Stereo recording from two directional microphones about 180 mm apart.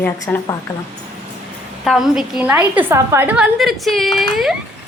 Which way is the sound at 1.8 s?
Centre (ahead or behind).